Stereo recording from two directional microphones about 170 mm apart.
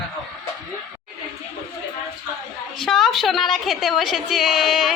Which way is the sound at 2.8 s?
Centre (ahead or behind).